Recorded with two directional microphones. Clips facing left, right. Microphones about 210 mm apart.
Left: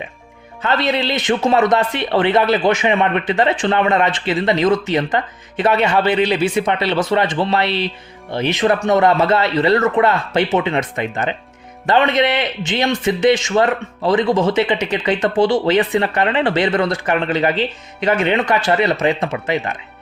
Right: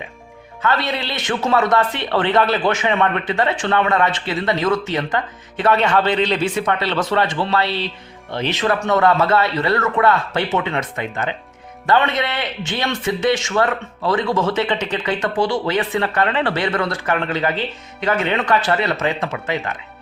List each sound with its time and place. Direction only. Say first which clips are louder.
0.6 s a man's voice: left 3 dB; 20° left (ahead or behind)